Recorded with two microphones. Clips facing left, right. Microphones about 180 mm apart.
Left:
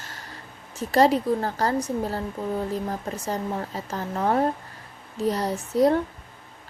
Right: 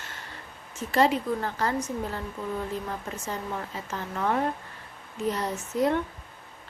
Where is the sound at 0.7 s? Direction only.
35° left (ahead or behind).